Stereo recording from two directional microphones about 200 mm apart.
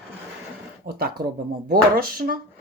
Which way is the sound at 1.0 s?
50° right (ahead or behind).